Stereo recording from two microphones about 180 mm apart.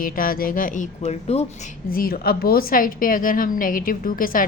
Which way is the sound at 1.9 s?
55° left (ahead or behind).